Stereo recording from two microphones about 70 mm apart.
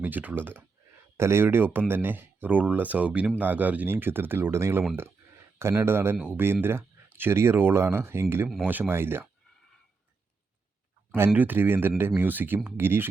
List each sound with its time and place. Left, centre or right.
0.0 s speech: right
11.3 s speech: right